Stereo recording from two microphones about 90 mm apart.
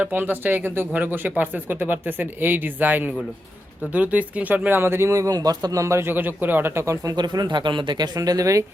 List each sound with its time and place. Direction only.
0.0 s speech: 20° right (ahead or behind)
7.2 s speech: 55° right (ahead or behind); by 8.6 s 40° right (ahead or behind)